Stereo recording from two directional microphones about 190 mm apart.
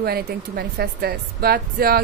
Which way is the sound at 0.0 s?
55° right (ahead or behind).